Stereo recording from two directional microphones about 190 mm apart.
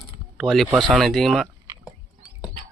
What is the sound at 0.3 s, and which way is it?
Speech, centre (ahead or behind).